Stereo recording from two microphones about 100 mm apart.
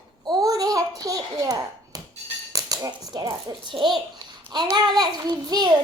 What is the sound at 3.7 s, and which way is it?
Child singing, 50° right (ahead or behind).